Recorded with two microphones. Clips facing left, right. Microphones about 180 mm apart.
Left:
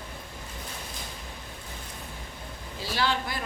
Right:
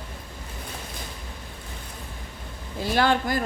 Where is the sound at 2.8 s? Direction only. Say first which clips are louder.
Right 7 dB; 55° right (ahead or behind).